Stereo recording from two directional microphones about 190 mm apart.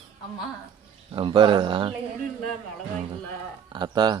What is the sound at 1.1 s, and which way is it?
Speech, 25° right (ahead or behind).